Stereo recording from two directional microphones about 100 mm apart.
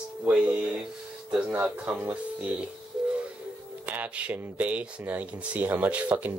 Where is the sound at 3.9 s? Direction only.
15° right (ahead or behind).